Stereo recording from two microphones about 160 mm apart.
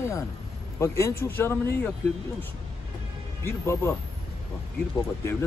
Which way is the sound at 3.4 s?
15° left (ahead or behind).